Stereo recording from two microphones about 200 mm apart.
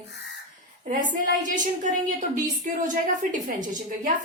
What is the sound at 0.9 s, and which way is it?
A woman's voice, 40° right (ahead or behind).